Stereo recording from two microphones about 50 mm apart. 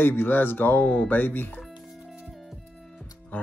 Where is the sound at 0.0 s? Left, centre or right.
Left.